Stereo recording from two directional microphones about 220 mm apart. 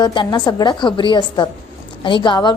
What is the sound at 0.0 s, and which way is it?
A woman's voice, 20° left (ahead or behind).